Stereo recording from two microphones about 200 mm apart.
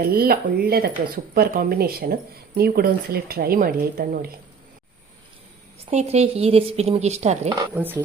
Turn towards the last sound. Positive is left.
turn(degrees=-10)  # may be behind; listen again after turning